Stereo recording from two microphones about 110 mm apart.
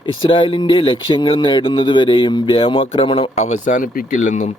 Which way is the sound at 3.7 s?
90° left.